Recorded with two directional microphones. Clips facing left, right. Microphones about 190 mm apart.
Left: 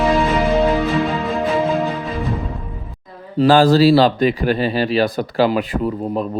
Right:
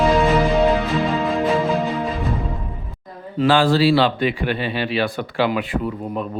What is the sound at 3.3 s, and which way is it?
Speech, 40° left (ahead or behind).